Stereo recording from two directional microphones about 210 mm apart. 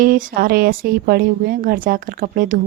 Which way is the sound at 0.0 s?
40° right (ahead or behind).